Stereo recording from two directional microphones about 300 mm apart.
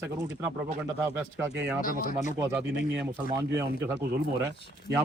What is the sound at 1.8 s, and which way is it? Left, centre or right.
Speech, left.